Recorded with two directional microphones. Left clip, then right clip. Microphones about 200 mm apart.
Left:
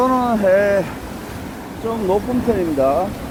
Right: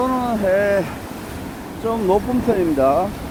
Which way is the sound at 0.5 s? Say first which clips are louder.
Left 2 dB; centre (ahead or behind).